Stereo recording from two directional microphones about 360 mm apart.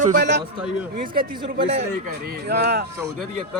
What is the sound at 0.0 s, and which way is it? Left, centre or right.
A man's voice, right.